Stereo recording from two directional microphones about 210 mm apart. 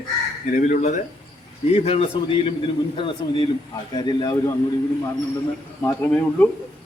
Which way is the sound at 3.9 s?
20° left (ahead or behind).